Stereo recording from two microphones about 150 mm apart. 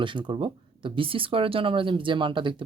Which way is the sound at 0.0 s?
30° right (ahead or behind).